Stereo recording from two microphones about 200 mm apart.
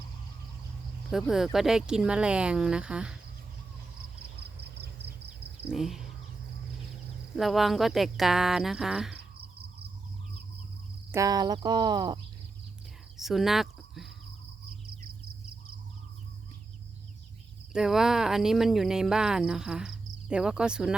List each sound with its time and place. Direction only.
1.1 s speech: centre (ahead or behind)
4.8 s a sound: 55° right (ahead or behind)
5.7 s speech: centre (ahead or behind)
7.3 s speech: centre (ahead or behind)
11.1 s speech: 15° right (ahead or behind)
13.1 s speech: centre (ahead or behind)
17.7 s speech: centre (ahead or behind)